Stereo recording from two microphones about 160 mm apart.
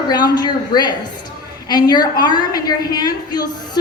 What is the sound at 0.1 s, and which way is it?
Speech, 25° left (ahead or behind).